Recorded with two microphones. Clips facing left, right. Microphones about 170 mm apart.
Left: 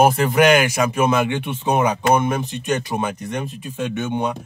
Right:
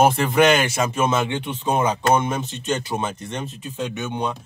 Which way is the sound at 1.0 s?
15° left (ahead or behind).